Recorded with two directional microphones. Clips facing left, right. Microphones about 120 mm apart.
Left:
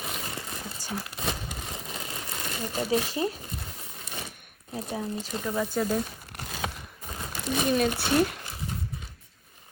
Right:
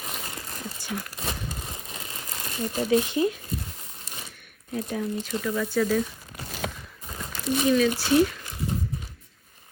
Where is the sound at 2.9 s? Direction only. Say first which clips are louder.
Right 5 dB; 35° left (ahead or behind).